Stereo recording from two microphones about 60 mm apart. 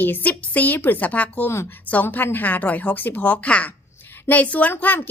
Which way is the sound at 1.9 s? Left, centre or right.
Left.